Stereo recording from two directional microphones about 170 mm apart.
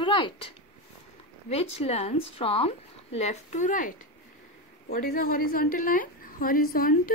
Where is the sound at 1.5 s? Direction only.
35° left (ahead or behind); by 6.9 s 55° left (ahead or behind).